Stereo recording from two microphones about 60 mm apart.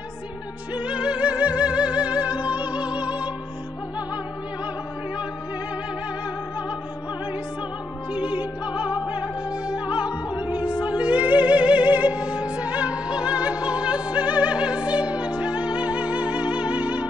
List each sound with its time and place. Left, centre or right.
0.7 s music: centre
8.1 s music: right